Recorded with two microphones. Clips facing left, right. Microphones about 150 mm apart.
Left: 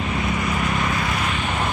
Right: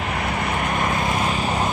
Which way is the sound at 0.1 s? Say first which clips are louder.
Even; 60° right (ahead or behind).